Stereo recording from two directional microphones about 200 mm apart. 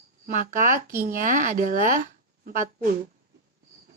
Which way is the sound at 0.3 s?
40° right (ahead or behind).